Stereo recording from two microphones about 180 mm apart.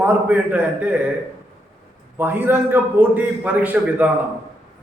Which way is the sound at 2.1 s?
10° right (ahead or behind).